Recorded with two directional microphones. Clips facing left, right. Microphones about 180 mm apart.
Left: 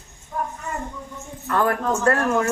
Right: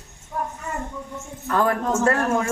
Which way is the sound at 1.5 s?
25° right (ahead or behind).